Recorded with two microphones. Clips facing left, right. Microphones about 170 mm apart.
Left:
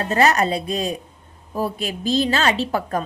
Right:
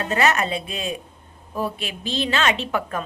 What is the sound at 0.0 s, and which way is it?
A woman's voice, 35° left (ahead or behind).